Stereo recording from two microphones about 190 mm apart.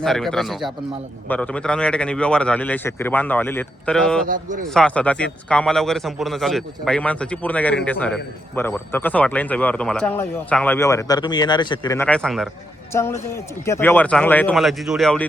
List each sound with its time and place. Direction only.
0.0 s a man's voice: centre (ahead or behind)
4.3 s speech: 40° right (ahead or behind)
4.7 s a man's voice: 5° left (ahead or behind)
12.9 s a man's voice: 15° left (ahead or behind)